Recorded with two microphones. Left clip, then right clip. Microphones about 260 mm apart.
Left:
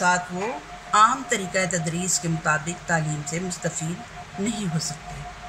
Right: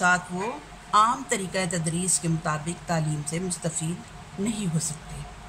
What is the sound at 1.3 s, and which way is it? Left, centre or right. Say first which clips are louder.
Speech: left 4 dB; right.